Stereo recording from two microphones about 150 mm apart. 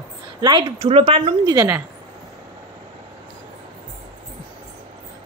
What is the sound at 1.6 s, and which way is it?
Speech, 15° right (ahead or behind).